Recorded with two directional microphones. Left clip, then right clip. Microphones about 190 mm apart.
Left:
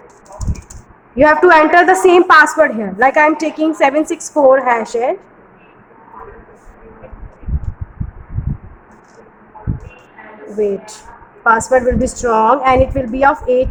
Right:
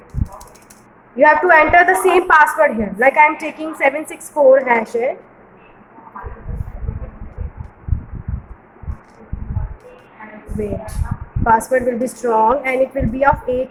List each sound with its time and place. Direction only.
1.1 s a woman's voice: 45° left (ahead or behind)
11.4 s a woman's voice: 40° left (ahead or behind)